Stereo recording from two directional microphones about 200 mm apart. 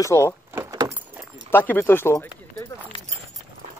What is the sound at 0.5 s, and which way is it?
Keys jangling, 15° right (ahead or behind).